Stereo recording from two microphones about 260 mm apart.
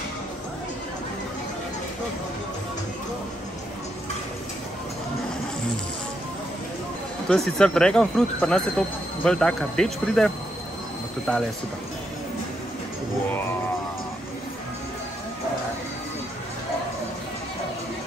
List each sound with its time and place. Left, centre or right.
7.2 s speech: centre
13.3 s music: centre